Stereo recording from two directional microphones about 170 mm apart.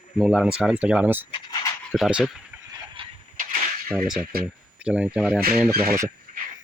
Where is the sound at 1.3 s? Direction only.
25° left (ahead or behind).